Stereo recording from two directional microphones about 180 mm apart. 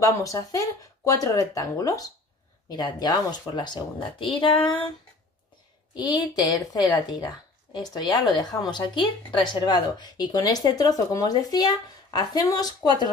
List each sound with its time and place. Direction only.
0.0 s a woman's voice: 20° left (ahead or behind)
5.9 s a woman's voice: 20° left (ahead or behind)